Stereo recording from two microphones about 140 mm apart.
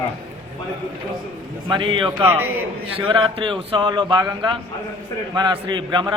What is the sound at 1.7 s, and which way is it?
A man's voice, 35° right (ahead or behind).